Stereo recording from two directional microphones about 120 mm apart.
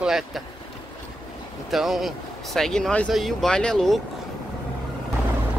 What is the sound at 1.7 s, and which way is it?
Speech, centre (ahead or behind).